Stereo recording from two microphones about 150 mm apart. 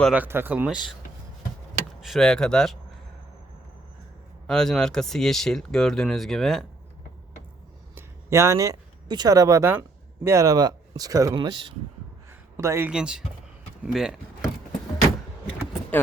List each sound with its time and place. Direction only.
0.1 s speech: 15° right (ahead or behind)
2.0 s speech: centre (ahead or behind)
4.4 s speech: 5° left (ahead or behind)
7.9 s speech: 20° right (ahead or behind)
11.3 s speech: 35° right (ahead or behind)
12.3 s a sound: 20° right (ahead or behind)
12.9 s speech: 5° right (ahead or behind)